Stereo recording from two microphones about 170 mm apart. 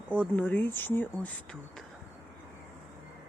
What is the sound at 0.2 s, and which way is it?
Speech, 10° left (ahead or behind).